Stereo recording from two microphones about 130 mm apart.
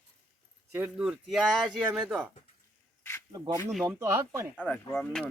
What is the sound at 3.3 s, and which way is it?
Speech, 30° right (ahead or behind).